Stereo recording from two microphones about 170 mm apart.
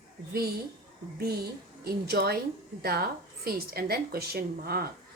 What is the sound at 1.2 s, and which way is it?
A woman's voice, 65° right (ahead or behind).